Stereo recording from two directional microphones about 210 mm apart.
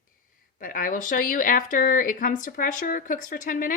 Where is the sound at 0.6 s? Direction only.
40° left (ahead or behind).